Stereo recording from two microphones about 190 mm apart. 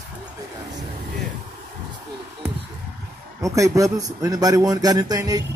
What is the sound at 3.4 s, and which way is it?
A man's voice, 15° right (ahead or behind).